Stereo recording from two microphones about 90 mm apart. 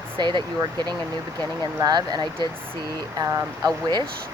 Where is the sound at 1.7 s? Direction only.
45° right (ahead or behind).